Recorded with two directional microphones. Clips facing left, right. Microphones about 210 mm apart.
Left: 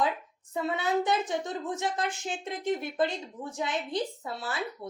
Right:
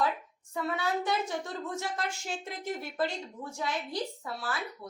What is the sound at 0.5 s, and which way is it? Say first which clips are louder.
Speech: left 3 dB; 20° left (ahead or behind).